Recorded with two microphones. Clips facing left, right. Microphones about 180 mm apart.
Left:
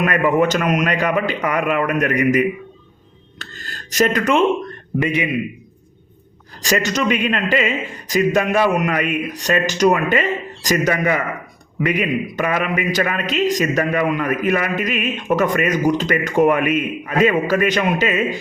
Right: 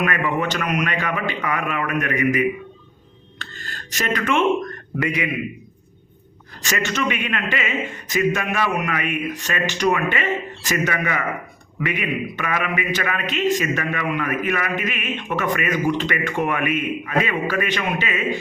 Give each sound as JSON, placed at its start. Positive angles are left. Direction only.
{"t": 0.0, "sound": "a man's voice", "side_deg": 40}
{"t": 6.6, "sound": "a man's voice", "side_deg": 35}